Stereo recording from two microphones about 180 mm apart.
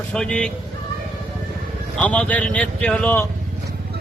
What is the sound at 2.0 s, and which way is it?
A man's voice, 5° left (ahead or behind).